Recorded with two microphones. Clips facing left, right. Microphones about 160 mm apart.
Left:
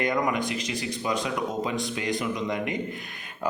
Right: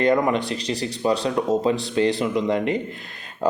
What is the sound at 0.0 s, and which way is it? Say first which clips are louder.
Speech: right 6 dB; 30° right (ahead or behind).